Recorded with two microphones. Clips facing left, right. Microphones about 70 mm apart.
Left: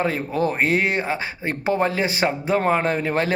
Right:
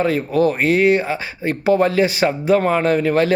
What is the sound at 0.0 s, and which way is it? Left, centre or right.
Speech, left.